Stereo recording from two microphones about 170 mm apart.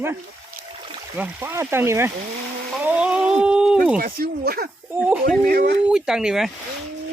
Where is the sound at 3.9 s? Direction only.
60° right (ahead or behind).